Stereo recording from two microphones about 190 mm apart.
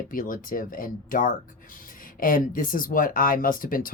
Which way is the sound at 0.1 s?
45° left (ahead or behind).